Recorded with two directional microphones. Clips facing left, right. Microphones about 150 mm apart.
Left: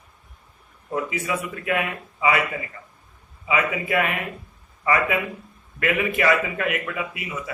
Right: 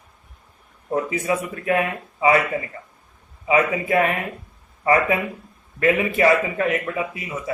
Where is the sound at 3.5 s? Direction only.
35° right (ahead or behind).